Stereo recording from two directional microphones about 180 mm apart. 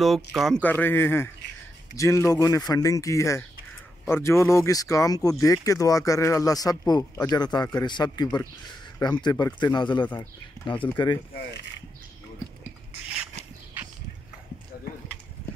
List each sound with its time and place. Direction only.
0.0 s speech: centre (ahead or behind); by 11.2 s 25° left (ahead or behind)